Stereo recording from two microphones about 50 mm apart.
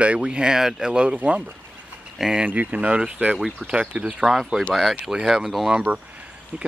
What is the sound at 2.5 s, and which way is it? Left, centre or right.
Speech, right.